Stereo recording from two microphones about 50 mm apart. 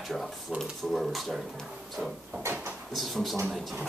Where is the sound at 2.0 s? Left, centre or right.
Right.